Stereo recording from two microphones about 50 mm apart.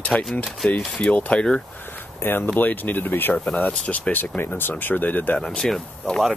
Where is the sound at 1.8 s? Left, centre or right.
Left.